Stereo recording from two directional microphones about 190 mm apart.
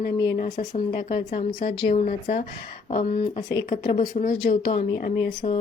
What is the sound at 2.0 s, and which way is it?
A woman's voice, 40° left (ahead or behind).